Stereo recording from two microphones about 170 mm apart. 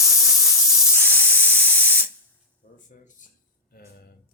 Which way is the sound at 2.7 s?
55° left (ahead or behind).